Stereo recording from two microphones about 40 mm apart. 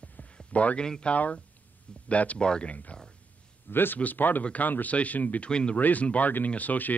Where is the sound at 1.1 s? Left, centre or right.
Left.